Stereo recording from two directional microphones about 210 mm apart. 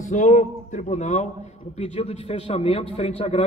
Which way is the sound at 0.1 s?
35° left (ahead or behind).